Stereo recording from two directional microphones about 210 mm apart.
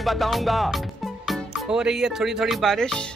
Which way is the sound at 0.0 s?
Centre (ahead or behind).